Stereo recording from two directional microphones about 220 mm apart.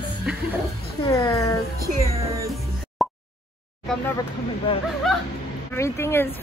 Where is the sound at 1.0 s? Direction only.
15° left (ahead or behind).